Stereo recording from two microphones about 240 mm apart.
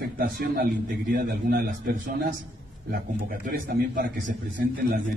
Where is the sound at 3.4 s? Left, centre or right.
Right.